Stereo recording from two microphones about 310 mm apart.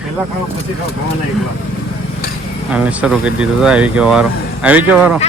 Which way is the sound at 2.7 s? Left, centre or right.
Centre.